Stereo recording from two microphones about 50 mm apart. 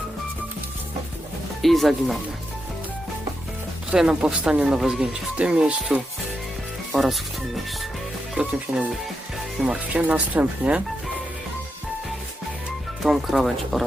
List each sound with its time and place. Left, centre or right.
1.6 s speech: centre
3.9 s speech: centre
6.9 s speech: centre
8.7 s speech: right
9.9 s speech: right
13.0 s speech: centre